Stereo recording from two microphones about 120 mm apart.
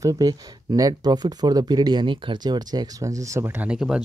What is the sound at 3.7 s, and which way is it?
Speech, 5° right (ahead or behind).